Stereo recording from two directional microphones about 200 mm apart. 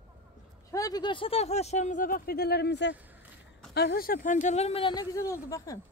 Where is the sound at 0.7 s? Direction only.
20° left (ahead or behind).